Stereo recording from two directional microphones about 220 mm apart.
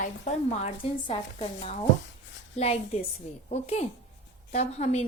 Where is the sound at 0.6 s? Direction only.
25° left (ahead or behind).